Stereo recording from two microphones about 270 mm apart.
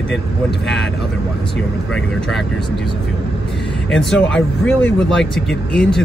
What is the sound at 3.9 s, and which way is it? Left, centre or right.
Speech, centre.